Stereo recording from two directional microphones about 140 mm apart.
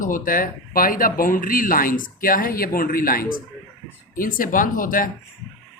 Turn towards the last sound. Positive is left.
turn(degrees=80)